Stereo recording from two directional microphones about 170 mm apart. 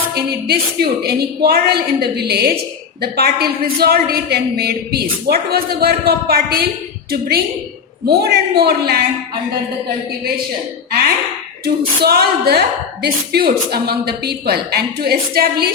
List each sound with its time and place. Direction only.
0.1 s a woman's voice: 70° right (ahead or behind)
11.6 s a woman's voice: 65° right (ahead or behind)